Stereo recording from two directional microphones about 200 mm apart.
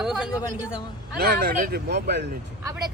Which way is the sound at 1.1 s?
50° right (ahead or behind).